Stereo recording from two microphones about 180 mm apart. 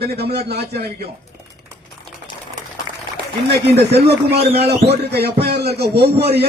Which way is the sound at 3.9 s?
65° right (ahead or behind).